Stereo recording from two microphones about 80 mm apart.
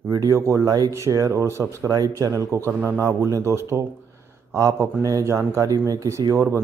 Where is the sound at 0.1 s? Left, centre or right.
Right.